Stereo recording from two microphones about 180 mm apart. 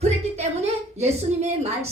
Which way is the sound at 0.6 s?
35° right (ahead or behind).